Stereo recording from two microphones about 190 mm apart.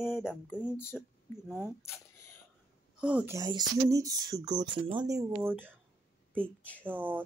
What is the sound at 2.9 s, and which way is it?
Speech, 5° right (ahead or behind).